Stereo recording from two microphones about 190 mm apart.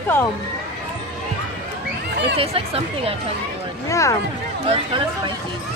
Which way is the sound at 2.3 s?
30° right (ahead or behind).